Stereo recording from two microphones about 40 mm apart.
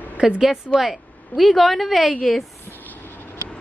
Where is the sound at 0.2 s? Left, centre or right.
Right.